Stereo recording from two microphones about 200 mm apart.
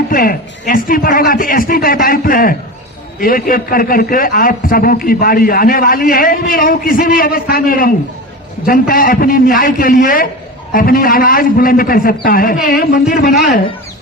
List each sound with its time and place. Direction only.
0.1 s a man's voice: 45° left (ahead or behind)